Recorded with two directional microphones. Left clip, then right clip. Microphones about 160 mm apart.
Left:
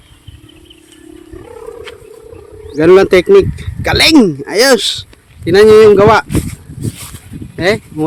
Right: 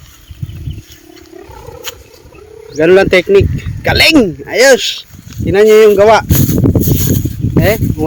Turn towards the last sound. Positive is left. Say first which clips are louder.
# right 1 dB
turn(degrees=10)  # may be behind; listen again after turning